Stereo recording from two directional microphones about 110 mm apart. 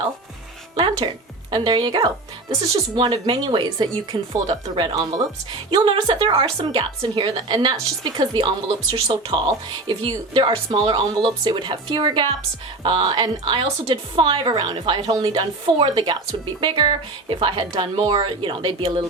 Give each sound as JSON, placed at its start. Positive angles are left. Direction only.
{"t": 0.8, "sound": "a woman's voice", "side_deg": -50}